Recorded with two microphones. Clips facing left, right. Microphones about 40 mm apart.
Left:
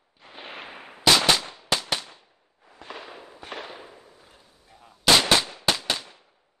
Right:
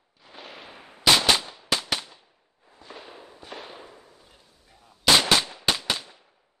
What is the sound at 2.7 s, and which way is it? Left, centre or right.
Fireworks, left.